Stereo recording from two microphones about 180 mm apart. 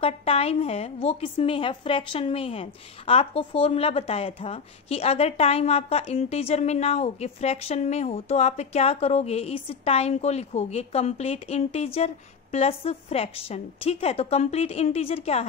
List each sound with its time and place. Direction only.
0.0 s a woman's voice: 35° left (ahead or behind)